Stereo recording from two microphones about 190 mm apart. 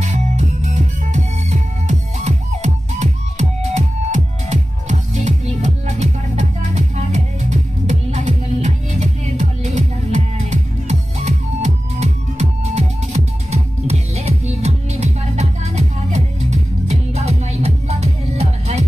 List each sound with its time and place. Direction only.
0.0 s music: 40° right (ahead or behind)